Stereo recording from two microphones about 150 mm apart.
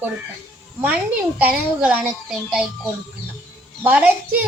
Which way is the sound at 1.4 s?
10° right (ahead or behind).